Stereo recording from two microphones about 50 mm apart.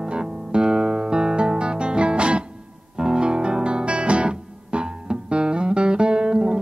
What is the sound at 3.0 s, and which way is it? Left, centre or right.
Guitar, centre.